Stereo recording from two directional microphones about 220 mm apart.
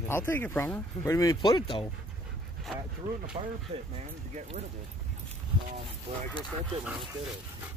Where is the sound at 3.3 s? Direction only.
20° right (ahead or behind).